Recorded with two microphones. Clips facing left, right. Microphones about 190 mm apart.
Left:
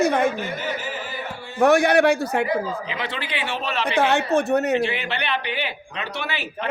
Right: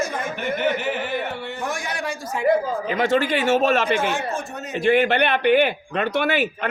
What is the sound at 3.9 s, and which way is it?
Speech, 65° left (ahead or behind).